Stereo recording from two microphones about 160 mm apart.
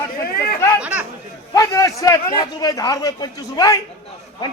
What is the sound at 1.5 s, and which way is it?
A man's voice, 20° left (ahead or behind).